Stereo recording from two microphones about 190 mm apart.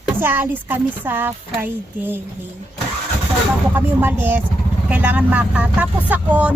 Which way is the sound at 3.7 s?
10° right (ahead or behind).